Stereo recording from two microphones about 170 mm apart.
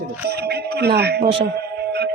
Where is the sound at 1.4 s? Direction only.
75° right (ahead or behind).